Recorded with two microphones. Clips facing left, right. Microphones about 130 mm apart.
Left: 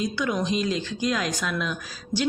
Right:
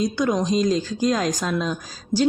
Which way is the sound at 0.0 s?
40° right (ahead or behind).